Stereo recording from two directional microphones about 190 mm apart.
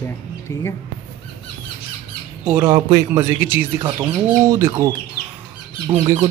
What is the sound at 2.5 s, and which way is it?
Speech, 20° right (ahead or behind).